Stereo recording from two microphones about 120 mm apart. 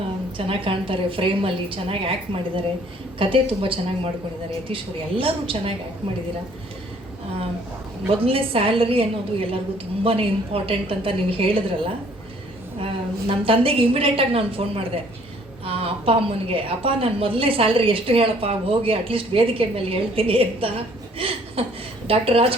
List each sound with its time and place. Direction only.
0.3 s a woman's voice: 50° right (ahead or behind)
3.2 s a woman's voice: 45° right (ahead or behind)
8.2 s a woman's voice: 50° right (ahead or behind)
21.2 s chuckle: 50° right (ahead or behind)
22.0 s a woman's voice: 50° right (ahead or behind)